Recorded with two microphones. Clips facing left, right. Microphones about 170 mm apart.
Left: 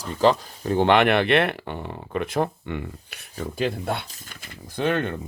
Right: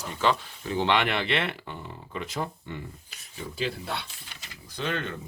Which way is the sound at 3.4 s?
50° left (ahead or behind).